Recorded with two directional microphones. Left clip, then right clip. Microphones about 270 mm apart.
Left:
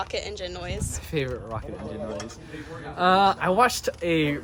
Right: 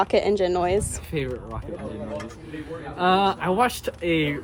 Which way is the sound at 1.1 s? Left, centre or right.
Centre.